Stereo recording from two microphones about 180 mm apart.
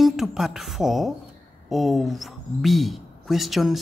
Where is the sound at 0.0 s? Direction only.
Centre (ahead or behind).